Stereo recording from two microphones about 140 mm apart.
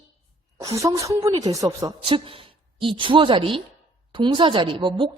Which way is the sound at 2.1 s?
40° right (ahead or behind).